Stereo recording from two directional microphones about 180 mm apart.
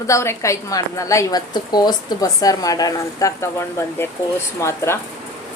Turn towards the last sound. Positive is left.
turn(degrees=15)  # may be behind; listen again after turning